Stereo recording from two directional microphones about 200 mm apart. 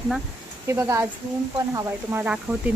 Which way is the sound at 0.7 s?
15° right (ahead or behind).